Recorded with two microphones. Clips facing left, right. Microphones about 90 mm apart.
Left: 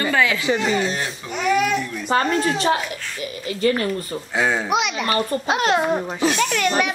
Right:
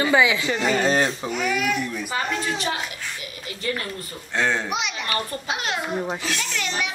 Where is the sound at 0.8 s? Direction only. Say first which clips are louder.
Right 5 dB; 40° right (ahead or behind).